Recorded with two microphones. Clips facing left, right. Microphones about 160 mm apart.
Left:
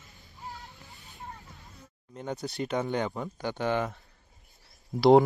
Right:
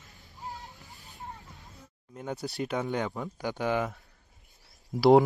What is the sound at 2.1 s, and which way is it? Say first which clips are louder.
Speech: even; 5° right (ahead or behind).